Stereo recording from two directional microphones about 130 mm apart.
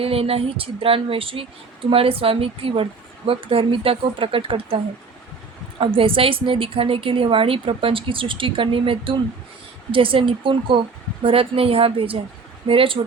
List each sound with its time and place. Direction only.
0.0 s a woman's voice: 45° right (ahead or behind)
5.8 s a woman's voice: 45° right (ahead or behind)